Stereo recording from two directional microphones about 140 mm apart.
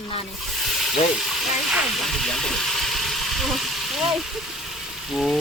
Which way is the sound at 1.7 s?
Centre (ahead or behind).